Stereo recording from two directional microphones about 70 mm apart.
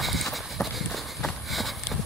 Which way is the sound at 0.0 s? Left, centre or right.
Centre.